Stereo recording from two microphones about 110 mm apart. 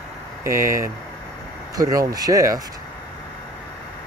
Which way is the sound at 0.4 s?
25° right (ahead or behind).